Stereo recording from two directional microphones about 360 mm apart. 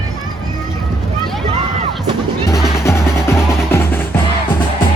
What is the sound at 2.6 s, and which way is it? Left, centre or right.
Music, centre.